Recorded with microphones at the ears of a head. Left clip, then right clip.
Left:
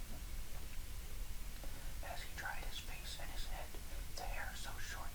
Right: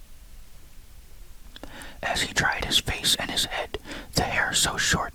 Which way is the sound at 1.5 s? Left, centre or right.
Right.